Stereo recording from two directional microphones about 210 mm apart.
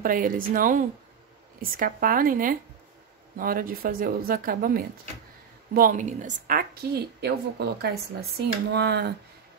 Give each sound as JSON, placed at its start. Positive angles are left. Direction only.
{"t": 0.0, "sound": "a woman's voice", "side_deg": -45}